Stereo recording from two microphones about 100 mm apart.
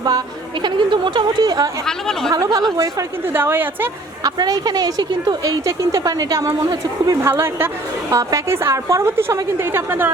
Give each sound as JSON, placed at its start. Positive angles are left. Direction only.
{"t": 0.6, "sound": "speech", "side_deg": -50}
{"t": 1.9, "sound": "speech", "side_deg": 5}
{"t": 2.3, "sound": "speech", "side_deg": -40}
{"t": 3.3, "sound": "a woman's voice", "side_deg": -20}
{"t": 4.2, "sound": "speech", "side_deg": -40}
{"t": 7.3, "sound": "a woman's voice", "side_deg": -25}